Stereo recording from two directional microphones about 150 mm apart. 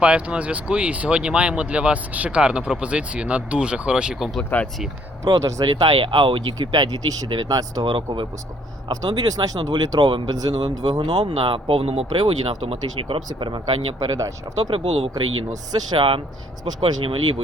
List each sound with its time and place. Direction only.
0.0 s speech: 5° right (ahead or behind)
5.2 s speech: 20° right (ahead or behind)
14.8 s speech: 40° right (ahead or behind)